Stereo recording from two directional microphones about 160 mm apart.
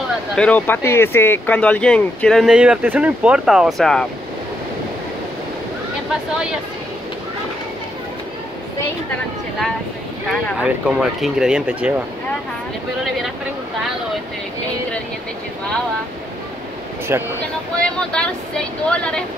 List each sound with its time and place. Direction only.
0.4 s speech: 10° left (ahead or behind)
10.6 s speech: 5° right (ahead or behind)
17.1 s speech: 15° right (ahead or behind)
17.7 s speech: 5° left (ahead or behind)